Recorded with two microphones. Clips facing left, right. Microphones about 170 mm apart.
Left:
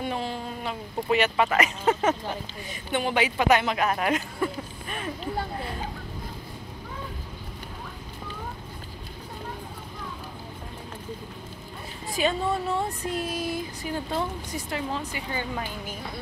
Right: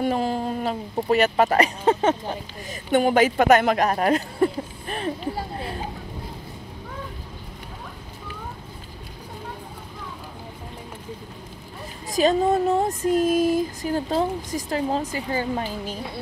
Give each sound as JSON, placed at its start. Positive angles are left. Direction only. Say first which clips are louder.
{"t": 0.0, "sound": "speech", "louder": "right 7 dB", "side_deg": -45}
{"t": 2.7, "sound": "speech", "louder": "right 8 dB", "side_deg": -45}
{"t": 12.1, "sound": "speech", "louder": "right 7 dB", "side_deg": -40}